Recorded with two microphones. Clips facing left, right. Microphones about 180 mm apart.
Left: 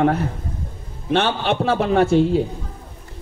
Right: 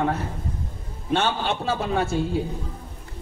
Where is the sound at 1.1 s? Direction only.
70° left (ahead or behind).